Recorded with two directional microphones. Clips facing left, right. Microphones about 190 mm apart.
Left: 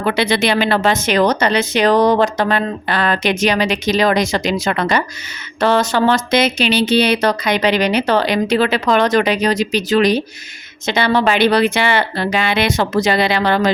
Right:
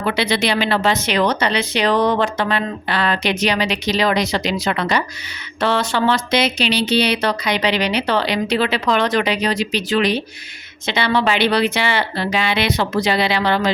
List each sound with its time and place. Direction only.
0.0 s speech: 50° left (ahead or behind)